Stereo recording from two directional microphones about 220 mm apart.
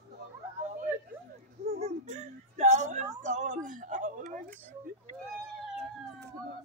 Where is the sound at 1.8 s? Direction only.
30° right (ahead or behind).